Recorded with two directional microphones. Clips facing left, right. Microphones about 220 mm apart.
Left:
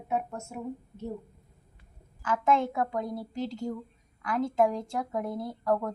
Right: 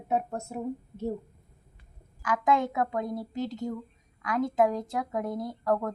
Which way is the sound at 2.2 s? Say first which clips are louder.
Even; 15° right (ahead or behind).